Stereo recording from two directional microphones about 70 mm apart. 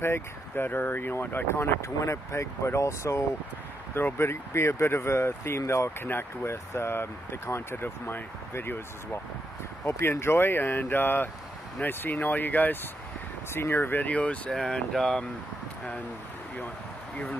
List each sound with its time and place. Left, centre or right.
0.0 s speech: left
5.9 s speech: left
9.8 s speech: left; by 14.5 s centre
14.5 s speech: centre